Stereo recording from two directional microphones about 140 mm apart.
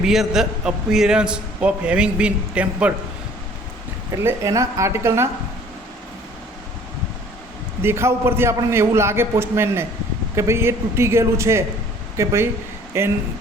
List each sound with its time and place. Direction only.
0.0 s a man's voice: centre (ahead or behind)
4.1 s a man's voice: 20° right (ahead or behind)
7.8 s a man's voice: 20° right (ahead or behind)